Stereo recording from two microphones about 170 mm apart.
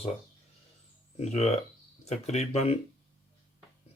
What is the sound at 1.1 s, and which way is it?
Speech, 40° left (ahead or behind).